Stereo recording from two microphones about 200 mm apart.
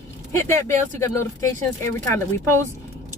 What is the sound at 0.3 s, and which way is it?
A woman's voice, 10° left (ahead or behind).